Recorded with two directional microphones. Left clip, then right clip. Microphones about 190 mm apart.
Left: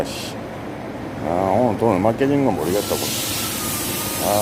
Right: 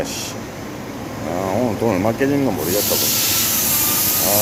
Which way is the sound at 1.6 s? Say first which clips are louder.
Left 1 dB; 5° left (ahead or behind).